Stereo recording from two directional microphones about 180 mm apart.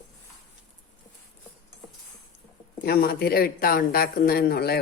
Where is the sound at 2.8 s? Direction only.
60° left (ahead or behind).